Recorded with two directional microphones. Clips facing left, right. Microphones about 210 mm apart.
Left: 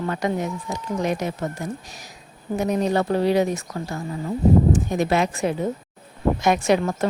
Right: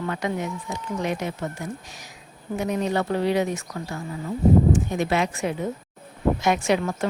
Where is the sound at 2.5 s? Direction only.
40° left (ahead or behind).